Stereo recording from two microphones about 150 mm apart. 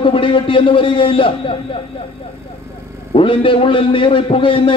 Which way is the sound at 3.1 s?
35° left (ahead or behind).